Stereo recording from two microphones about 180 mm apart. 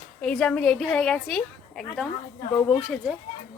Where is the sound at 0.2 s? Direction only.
5° left (ahead or behind).